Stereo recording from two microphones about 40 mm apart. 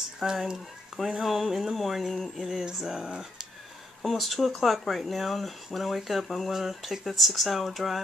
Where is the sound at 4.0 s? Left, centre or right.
Centre.